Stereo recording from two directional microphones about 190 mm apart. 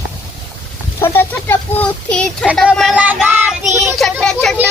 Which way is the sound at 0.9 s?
10° left (ahead or behind).